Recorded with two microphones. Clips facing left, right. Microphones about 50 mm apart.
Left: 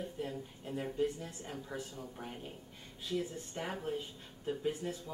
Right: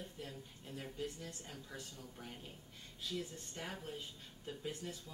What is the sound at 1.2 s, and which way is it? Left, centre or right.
Speech, left.